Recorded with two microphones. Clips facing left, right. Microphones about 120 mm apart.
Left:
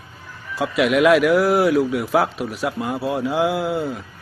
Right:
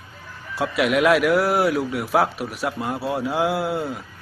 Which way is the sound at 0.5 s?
Centre (ahead or behind).